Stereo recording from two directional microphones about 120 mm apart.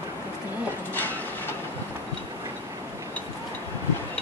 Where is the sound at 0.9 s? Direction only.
15° left (ahead or behind).